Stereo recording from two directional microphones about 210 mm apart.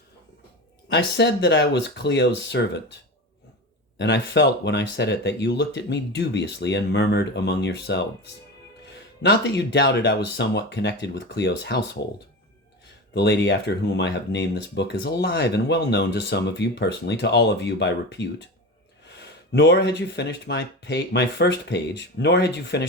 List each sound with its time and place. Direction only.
0.9 s speech: 55° left (ahead or behind)
3.9 s speech: 55° left (ahead or behind)
9.2 s speech: 55° left (ahead or behind)
13.1 s speech: 55° left (ahead or behind)
19.5 s speech: 55° left (ahead or behind)